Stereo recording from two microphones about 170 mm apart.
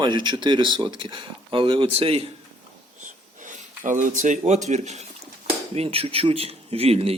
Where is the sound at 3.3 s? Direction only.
50° right (ahead or behind).